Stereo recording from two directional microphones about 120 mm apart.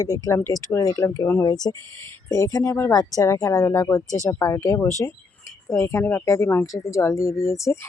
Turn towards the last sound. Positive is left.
turn(degrees=25)  # may be behind; listen again after turning